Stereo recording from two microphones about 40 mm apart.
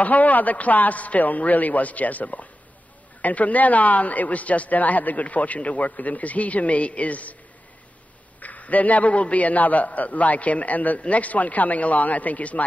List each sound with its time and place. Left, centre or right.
0.0 s a man's voice: left
8.4 s a man's voice: left